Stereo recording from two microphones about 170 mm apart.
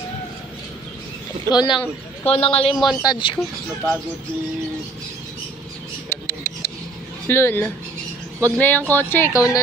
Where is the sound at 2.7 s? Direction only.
Centre (ahead or behind).